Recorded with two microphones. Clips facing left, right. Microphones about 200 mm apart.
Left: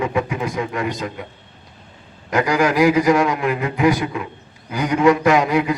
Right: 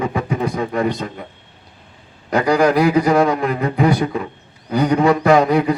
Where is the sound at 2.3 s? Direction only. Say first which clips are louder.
Right 3 dB; 35° right (ahead or behind).